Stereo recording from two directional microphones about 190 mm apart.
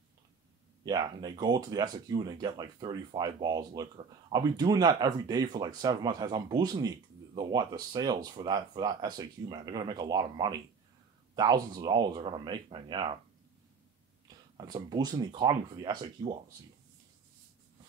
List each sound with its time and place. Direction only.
0.8 s speech: 20° right (ahead or behind)
14.2 s speech: 20° right (ahead or behind)